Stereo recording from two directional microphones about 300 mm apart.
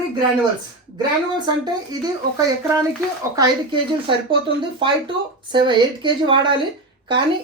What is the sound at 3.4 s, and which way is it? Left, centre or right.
Speech, centre.